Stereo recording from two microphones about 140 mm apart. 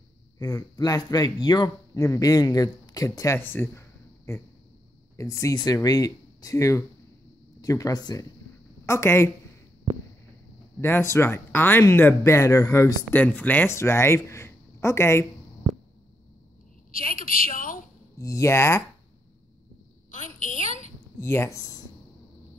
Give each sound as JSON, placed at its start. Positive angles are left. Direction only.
{"t": 0.4, "sound": "a man's voice", "side_deg": 25}
{"t": 3.3, "sound": "a man's voice", "side_deg": 15}
{"t": 10.8, "sound": "a man's voice", "side_deg": 15}
{"t": 13.1, "sound": "a man's voice", "side_deg": 10}
{"t": 16.9, "sound": "a woman's voice", "side_deg": 90}
{"t": 18.2, "sound": "a man's voice", "side_deg": 20}
{"t": 20.3, "sound": "a sound", "side_deg": 60}
{"t": 21.2, "sound": "speech", "side_deg": 15}